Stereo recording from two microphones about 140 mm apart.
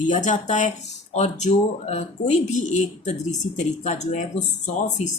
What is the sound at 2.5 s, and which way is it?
Speech, 60° left (ahead or behind).